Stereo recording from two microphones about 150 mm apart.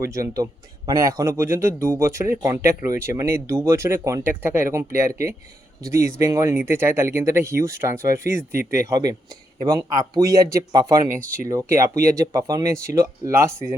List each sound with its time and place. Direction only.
0.0 s speech: 20° right (ahead or behind)